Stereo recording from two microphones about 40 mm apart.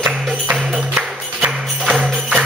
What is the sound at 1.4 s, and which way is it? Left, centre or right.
Music, right.